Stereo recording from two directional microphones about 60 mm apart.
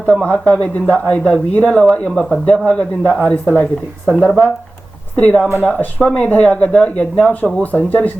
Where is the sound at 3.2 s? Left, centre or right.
Left.